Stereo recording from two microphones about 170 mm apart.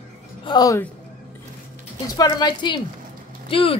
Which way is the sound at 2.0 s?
20° left (ahead or behind).